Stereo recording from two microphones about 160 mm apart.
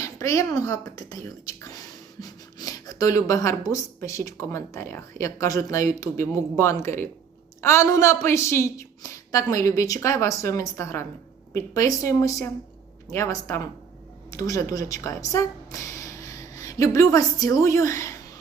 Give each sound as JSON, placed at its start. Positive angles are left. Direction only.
{"t": 0.0, "sound": "a woman's voice", "side_deg": 20}